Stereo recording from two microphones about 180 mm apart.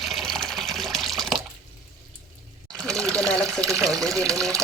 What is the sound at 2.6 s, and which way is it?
Water, 20° right (ahead or behind).